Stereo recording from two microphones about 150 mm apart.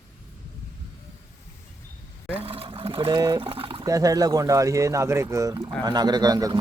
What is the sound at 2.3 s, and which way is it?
Water, 40° right (ahead or behind).